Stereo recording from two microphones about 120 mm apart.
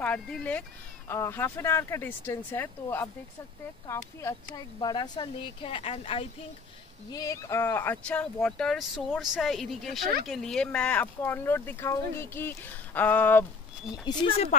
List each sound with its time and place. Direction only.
0.0 s a woman's voice: 10° left (ahead or behind)
4.7 s speech: 35° left (ahead or behind)
7.1 s a woman's voice: 30° left (ahead or behind)
14.1 s speech: 35° left (ahead or behind)
14.5 s speech: 80° left